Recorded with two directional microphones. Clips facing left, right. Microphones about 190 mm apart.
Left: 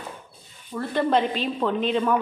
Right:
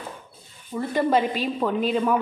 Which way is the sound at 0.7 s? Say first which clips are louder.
Right 1 dB; 10° right (ahead or behind).